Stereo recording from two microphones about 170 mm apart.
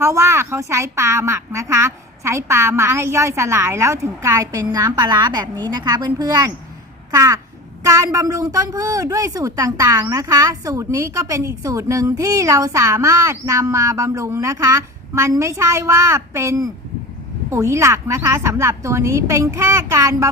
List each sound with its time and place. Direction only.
0.0 s a woman's voice: 15° right (ahead or behind)